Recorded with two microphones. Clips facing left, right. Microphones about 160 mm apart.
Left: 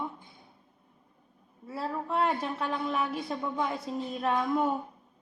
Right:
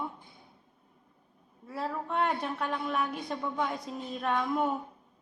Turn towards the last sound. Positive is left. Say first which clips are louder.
# left 2 dB
turn(degrees=0)  # may be behind; listen again after turning